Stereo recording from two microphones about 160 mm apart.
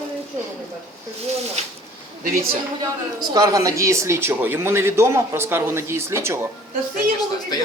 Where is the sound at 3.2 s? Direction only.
25° right (ahead or behind).